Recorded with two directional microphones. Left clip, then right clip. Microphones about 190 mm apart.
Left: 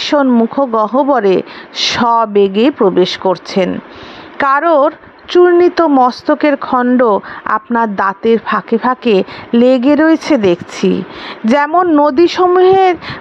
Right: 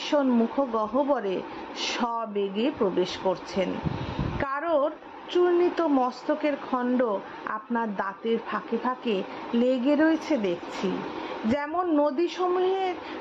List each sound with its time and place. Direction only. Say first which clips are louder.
0.0 s speech: left 13 dB; 45° left (ahead or behind)